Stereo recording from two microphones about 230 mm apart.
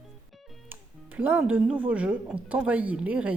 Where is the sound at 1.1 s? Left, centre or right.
Centre.